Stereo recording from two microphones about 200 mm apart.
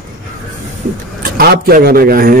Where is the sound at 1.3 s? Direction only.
50° right (ahead or behind).